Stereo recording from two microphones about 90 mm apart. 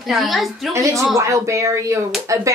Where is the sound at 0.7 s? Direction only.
35° right (ahead or behind).